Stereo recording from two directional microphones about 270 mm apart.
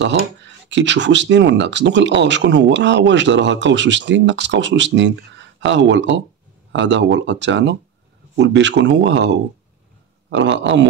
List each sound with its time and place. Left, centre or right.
0.0 s speech: right